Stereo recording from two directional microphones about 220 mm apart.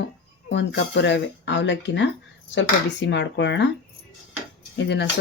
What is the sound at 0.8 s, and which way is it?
Speech, 55° left (ahead or behind).